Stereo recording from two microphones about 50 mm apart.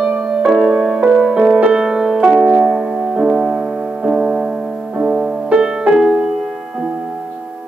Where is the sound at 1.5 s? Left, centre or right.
Right.